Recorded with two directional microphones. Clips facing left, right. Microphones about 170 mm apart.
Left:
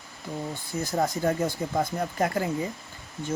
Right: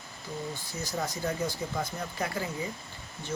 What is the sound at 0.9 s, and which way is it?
Speech, 50° left (ahead or behind).